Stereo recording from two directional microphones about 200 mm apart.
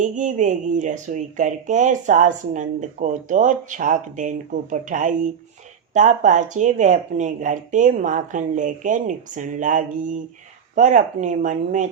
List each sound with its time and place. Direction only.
0.0 s speech: 40° right (ahead or behind)